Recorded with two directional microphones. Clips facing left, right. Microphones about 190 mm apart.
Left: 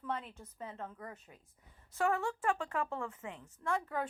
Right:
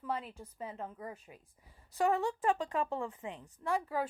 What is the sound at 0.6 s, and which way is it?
Speech, 10° right (ahead or behind).